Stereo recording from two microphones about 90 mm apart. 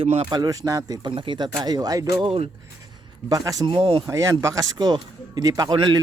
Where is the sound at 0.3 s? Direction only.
45° right (ahead or behind).